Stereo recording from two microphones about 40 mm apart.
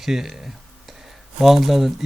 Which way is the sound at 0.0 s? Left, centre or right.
Centre.